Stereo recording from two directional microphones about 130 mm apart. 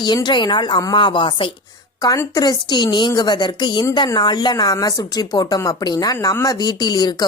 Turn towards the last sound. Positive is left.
turn(degrees=30)  # may be behind; listen again after turning